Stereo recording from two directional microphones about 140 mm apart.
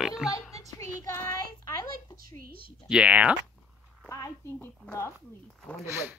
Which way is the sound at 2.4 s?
90° right.